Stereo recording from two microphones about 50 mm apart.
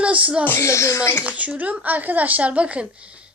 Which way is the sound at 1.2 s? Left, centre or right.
Right.